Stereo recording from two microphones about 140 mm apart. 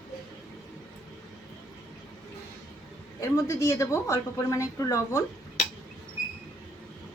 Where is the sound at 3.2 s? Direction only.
20° left (ahead or behind).